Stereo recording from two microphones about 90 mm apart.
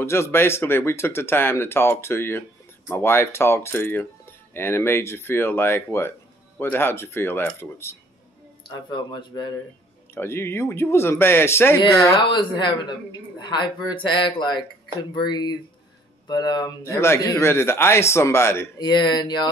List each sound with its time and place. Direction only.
0.0 s speech: 30° left (ahead or behind)
8.6 s speech: 60° left (ahead or behind)
9.3 s mantra: 50° left (ahead or behind)
10.1 s speech: 25° left (ahead or behind)
12.3 s speech: 60° left (ahead or behind)
15.1 s mantra: 55° left (ahead or behind)
16.8 s speech: 30° left (ahead or behind)
18.8 s speech: 55° left (ahead or behind)